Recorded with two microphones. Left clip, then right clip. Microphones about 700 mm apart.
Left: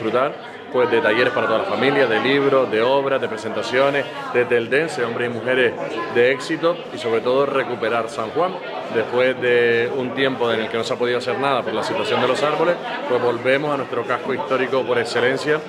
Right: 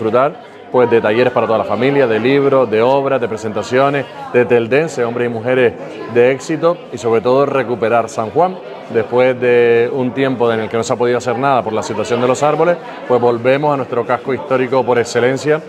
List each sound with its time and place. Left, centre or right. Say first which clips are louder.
0.7 s a man's voice: right 5 dB; right